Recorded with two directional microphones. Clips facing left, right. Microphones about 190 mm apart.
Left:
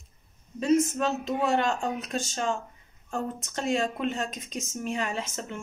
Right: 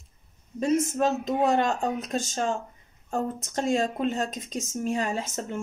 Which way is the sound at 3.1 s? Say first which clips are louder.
Right 3 dB; 45° right (ahead or behind).